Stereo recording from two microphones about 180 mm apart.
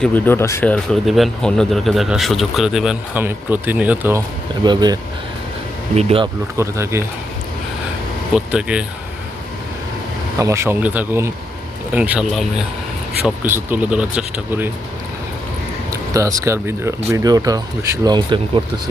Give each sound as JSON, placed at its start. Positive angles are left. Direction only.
{"t": 0.0, "sound": "speech", "side_deg": 10}
{"t": 4.6, "sound": "speech", "side_deg": -25}
{"t": 6.0, "sound": "speech", "side_deg": -35}
{"t": 6.6, "sound": "speech", "side_deg": -15}
{"t": 8.5, "sound": "speech", "side_deg": -5}
{"t": 10.3, "sound": "speech", "side_deg": -15}
{"t": 15.9, "sound": "speech", "side_deg": -15}